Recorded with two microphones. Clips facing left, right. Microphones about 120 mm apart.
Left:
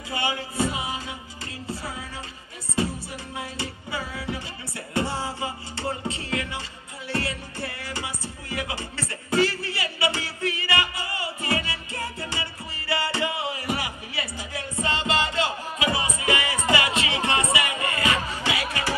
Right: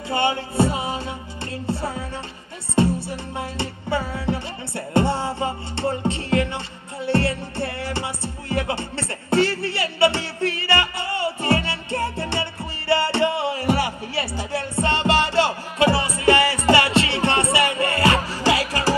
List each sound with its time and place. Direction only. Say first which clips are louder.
0.1 s music: right 7 dB; 30° right (ahead or behind)